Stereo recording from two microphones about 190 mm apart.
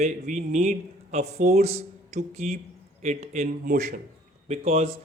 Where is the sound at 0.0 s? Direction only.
40° right (ahead or behind).